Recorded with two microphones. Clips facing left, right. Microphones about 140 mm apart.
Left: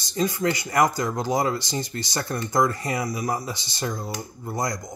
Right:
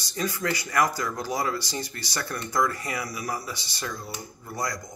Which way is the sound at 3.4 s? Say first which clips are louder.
Left 5 dB; 25° left (ahead or behind).